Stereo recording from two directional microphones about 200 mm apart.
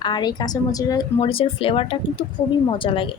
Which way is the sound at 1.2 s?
30° left (ahead or behind).